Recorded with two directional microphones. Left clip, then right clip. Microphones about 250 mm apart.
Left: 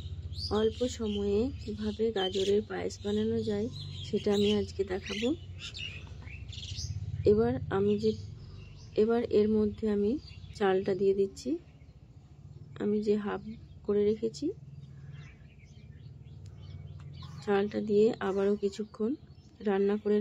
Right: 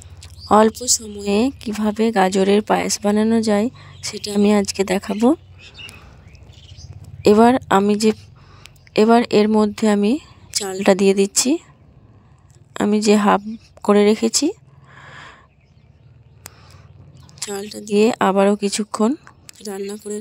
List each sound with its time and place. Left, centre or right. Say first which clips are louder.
0.5 s speech: right 16 dB; right
7.2 s speech: right 14 dB; right
12.7 s speech: right 13 dB; right
17.4 s a sound: right 2 dB; right
17.8 s speech: right 14 dB; right
20.1 s a sound: left 1 dB; centre